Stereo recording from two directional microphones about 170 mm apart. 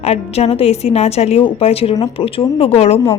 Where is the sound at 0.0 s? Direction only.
40° left (ahead or behind).